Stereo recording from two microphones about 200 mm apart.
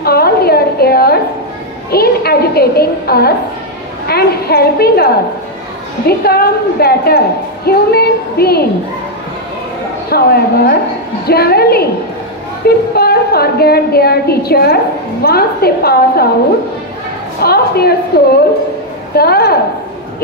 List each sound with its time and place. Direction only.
0.0 s a sound: 50° left (ahead or behind)
1.9 s a woman's voice: 50° left (ahead or behind)
10.0 s a woman's voice: 50° left (ahead or behind)
17.4 s a woman's voice: 50° left (ahead or behind)
19.1 s a woman's voice: 50° left (ahead or behind)